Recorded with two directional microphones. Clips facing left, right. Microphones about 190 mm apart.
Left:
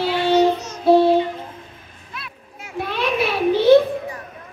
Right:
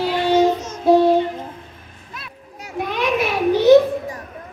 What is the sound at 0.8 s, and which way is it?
Music, 15° right (ahead or behind).